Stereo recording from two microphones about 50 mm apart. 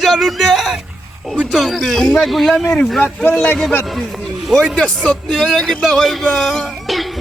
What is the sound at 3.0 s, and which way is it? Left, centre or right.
Speech, left.